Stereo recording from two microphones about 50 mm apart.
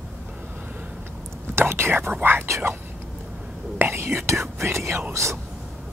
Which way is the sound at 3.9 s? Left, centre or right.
Right.